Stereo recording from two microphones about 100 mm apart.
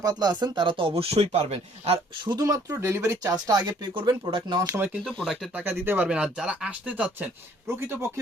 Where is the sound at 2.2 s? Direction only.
45° right (ahead or behind).